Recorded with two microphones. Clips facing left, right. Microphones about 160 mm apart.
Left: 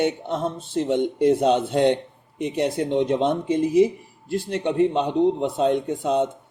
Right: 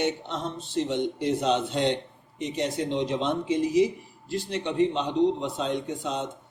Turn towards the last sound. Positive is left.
turn(degrees=55)  # may be behind; listen again after turning